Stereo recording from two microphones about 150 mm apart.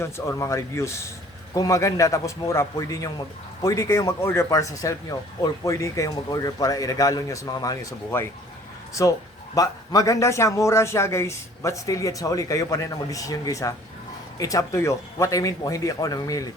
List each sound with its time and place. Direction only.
0.0 s a man's voice: 20° left (ahead or behind)
9.6 s a man's voice: 20° left (ahead or behind)